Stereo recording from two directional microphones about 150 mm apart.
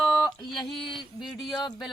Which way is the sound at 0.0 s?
Centre (ahead or behind).